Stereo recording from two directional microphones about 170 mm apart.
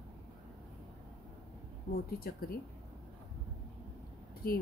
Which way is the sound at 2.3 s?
65° left (ahead or behind).